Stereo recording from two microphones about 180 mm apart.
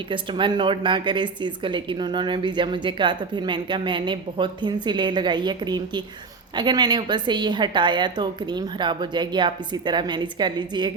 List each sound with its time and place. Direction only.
0.1 s a woman's voice: 25° right (ahead or behind)